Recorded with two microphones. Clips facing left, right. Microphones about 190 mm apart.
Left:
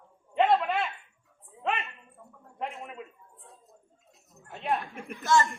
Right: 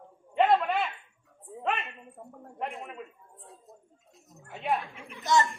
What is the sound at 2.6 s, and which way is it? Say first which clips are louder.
Speech: even; centre (ahead or behind).